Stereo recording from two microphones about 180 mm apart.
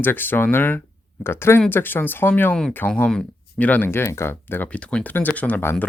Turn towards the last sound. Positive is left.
turn(degrees=10)  # may be behind; listen again after turning